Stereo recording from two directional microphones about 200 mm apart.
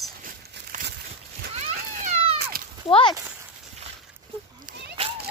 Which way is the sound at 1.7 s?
35° right (ahead or behind).